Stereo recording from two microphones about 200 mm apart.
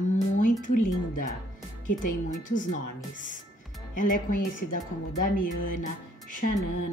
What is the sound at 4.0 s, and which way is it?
Speech, 40° left (ahead or behind).